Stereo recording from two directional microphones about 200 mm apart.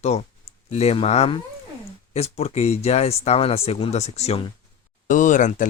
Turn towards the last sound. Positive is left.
turn(degrees=40)  # may be behind; listen again after turning